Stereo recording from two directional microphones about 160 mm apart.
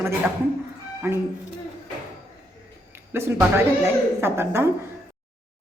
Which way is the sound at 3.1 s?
15° right (ahead or behind).